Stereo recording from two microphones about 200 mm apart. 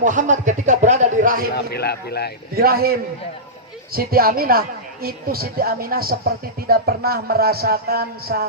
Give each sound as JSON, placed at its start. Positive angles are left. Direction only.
{"t": 0.0, "sound": "a sound", "side_deg": -40}
{"t": 1.5, "sound": "speech", "side_deg": 55}
{"t": 2.6, "sound": "speech", "side_deg": -50}
{"t": 3.9, "sound": "speech", "side_deg": -50}